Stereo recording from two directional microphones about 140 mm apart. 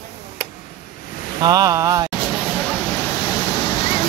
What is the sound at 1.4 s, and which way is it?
Speech, 25° right (ahead or behind).